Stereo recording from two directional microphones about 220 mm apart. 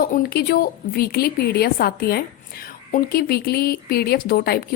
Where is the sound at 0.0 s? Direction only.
40° left (ahead or behind).